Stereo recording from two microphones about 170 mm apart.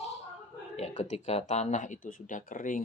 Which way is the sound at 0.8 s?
40° left (ahead or behind).